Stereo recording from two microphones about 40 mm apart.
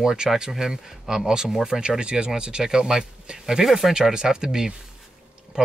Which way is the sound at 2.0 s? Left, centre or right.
Right.